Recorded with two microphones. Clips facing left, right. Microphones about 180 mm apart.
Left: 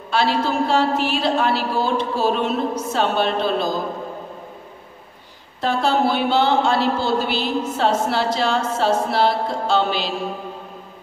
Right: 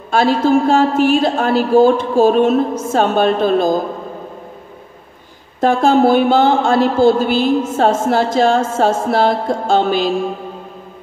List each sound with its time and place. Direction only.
0.1 s a man's voice: 45° right (ahead or behind)
5.6 s a man's voice: 50° right (ahead or behind)